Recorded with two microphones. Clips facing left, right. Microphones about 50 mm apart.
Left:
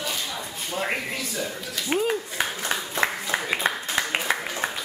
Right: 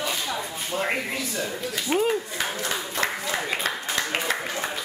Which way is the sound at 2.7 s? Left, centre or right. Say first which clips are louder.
Left 2 dB; centre.